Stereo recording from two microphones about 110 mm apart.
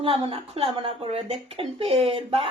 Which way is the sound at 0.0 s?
55° right (ahead or behind).